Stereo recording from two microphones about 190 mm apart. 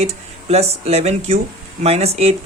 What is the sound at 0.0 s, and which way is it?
Speech, 35° right (ahead or behind).